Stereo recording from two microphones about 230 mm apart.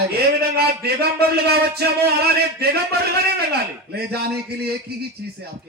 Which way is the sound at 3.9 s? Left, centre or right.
Right.